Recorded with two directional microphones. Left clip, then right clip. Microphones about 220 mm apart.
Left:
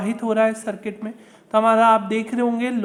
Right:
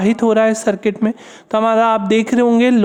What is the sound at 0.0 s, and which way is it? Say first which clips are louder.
Speech: right 6 dB; 45° right (ahead or behind).